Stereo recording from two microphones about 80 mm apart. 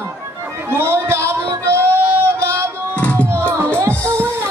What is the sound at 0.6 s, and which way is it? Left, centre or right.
Music, right.